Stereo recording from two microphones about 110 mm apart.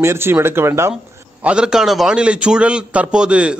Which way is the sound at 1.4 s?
10° right (ahead or behind).